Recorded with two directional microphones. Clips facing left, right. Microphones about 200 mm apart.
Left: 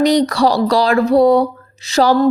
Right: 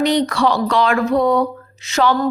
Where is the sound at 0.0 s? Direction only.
40° left (ahead or behind).